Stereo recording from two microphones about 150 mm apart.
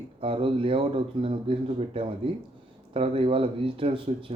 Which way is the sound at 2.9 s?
40° right (ahead or behind).